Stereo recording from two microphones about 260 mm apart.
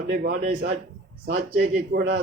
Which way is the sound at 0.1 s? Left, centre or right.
Right.